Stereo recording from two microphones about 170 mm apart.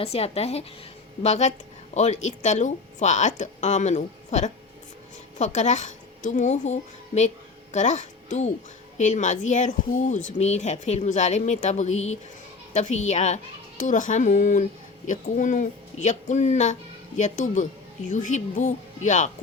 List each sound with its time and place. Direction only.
0.0 s a child's voice: 35° left (ahead or behind)